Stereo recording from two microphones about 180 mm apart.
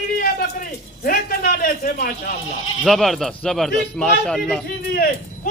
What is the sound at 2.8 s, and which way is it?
A man's voice, centre (ahead or behind).